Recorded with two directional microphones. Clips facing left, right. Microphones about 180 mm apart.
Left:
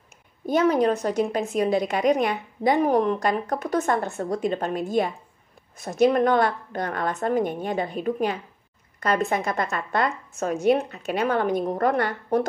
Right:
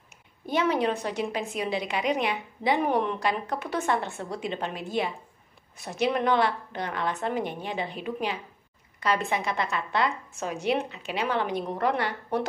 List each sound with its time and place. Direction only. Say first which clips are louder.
0.5 s a woman's voice: left 5 dB; 45° left (ahead or behind)